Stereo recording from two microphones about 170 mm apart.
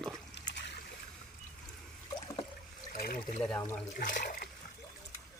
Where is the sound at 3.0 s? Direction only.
55° left (ahead or behind).